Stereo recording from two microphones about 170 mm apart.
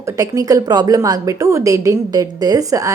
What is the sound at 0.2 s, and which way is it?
A woman's voice, 20° right (ahead or behind).